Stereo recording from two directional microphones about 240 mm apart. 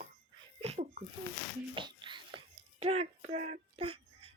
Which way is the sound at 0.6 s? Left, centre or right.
Right.